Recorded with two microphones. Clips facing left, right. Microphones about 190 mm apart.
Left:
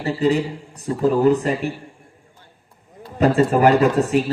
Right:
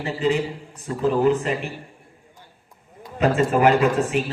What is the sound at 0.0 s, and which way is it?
Speech, 35° left (ahead or behind).